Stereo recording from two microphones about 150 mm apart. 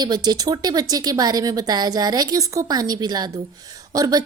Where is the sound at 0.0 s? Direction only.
25° right (ahead or behind).